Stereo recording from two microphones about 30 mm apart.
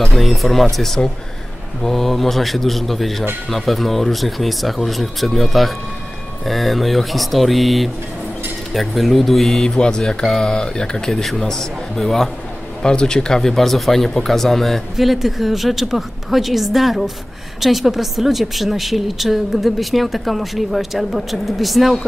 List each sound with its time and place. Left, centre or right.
0.1 s a woman's voice: centre
9.8 s speech: left
11.1 s speech: centre
12.8 s speech: left
13.5 s speech: centre
15.0 s a woman's voice: centre